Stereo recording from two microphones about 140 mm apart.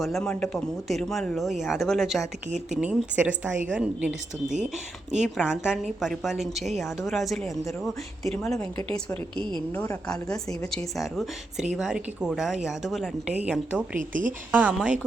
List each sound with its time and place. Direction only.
0.0 s a woman's voice: centre (ahead or behind)
10.1 s a woman's voice: 5° left (ahead or behind)
14.1 s a woman's voice: 70° right (ahead or behind)
14.5 s a woman's voice: 10° right (ahead or behind)